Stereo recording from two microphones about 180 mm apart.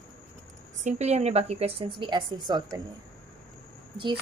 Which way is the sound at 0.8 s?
40° right (ahead or behind).